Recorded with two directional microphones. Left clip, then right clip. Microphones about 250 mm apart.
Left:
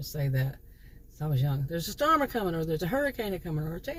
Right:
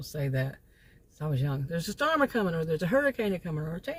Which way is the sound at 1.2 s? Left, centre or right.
Centre.